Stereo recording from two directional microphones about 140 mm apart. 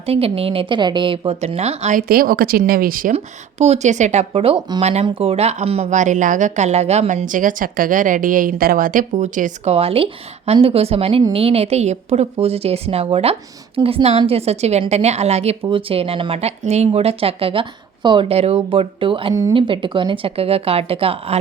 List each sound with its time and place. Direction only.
0.0 s a woman's voice: 45° right (ahead or behind)
2.0 s speech: 90° right
3.6 s a woman's voice: 55° right (ahead or behind)
5.0 s a woman's voice: 40° right (ahead or behind); by 9.7 s 60° right (ahead or behind)
9.7 s a woman's voice: 45° right (ahead or behind)
19.3 s speech: 25° right (ahead or behind)
19.5 s a woman's voice: 35° right (ahead or behind)